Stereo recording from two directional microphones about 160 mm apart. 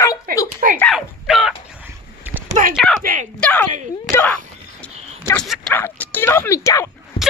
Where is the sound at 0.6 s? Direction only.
60° right (ahead or behind).